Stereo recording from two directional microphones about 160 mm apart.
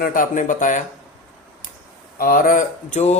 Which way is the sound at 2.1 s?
60° left (ahead or behind).